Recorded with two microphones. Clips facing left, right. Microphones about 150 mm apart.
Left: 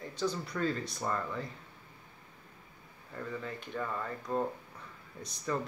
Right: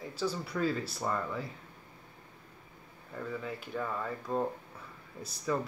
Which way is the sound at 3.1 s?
5° right (ahead or behind).